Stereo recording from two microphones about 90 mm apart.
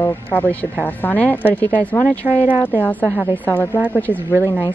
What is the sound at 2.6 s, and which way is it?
Speech, 20° left (ahead or behind).